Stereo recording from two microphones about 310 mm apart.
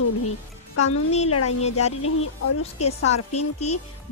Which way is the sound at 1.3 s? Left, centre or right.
Left.